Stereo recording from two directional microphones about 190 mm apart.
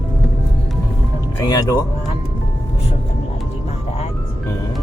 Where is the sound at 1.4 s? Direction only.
20° left (ahead or behind).